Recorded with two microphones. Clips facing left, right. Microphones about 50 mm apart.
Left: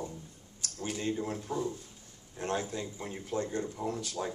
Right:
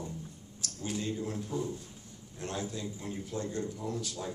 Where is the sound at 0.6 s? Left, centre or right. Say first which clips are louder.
Left 1 dB; left.